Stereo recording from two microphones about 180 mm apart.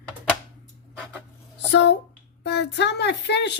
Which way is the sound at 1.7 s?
75° left (ahead or behind).